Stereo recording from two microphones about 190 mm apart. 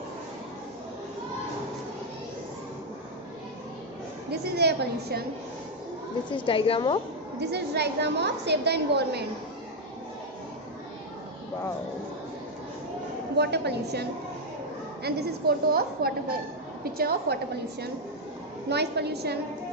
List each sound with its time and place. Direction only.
4.3 s a woman's voice: 60° right (ahead or behind)
6.3 s a woman's voice: 30° left (ahead or behind)
7.3 s a woman's voice: 60° right (ahead or behind)
13.4 s a woman's voice: 60° right (ahead or behind)
15.0 s a woman's voice: 55° right (ahead or behind)